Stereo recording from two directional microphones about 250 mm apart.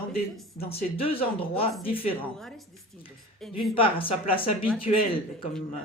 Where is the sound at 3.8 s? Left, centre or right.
Left.